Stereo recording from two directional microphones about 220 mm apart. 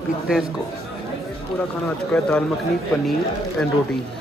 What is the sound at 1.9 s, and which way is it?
Speech, 5° left (ahead or behind).